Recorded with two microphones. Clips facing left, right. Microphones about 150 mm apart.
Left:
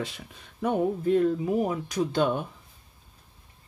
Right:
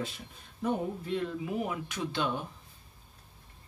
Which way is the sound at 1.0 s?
45° left (ahead or behind).